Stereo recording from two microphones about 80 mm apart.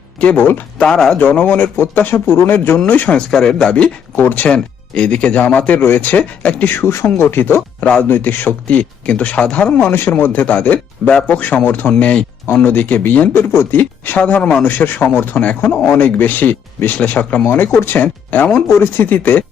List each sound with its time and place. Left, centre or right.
0.2 s speech: centre
0.8 s speech: centre
1.1 s speech: centre
3.2 s speech: centre
9.9 s speech: left
18.7 s speech: left